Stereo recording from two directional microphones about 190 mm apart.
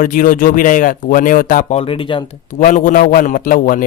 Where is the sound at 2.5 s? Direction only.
45° left (ahead or behind).